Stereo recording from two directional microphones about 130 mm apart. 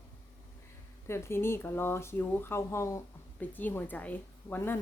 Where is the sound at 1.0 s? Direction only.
20° left (ahead or behind).